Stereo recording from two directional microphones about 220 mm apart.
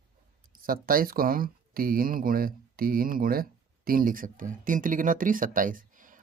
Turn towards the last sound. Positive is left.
turn(degrees=-35)  # may be behind; listen again after turning